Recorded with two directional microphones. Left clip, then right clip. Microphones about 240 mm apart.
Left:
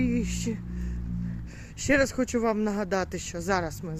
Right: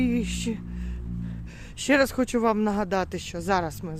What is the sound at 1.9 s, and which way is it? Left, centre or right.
Speech, centre.